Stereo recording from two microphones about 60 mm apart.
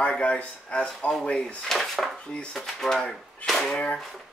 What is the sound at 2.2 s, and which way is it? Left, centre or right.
Speech, centre.